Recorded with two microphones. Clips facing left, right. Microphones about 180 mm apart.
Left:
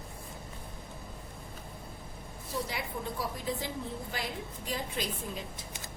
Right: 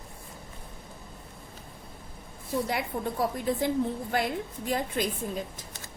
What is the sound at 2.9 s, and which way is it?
Speech, 45° right (ahead or behind).